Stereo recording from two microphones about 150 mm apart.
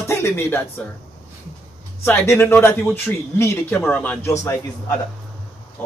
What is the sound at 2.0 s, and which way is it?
A man's voice, 15° left (ahead or behind).